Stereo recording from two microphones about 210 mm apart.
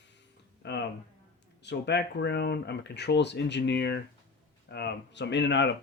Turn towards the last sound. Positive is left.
turn(degrees=55)  # may be behind; listen again after turning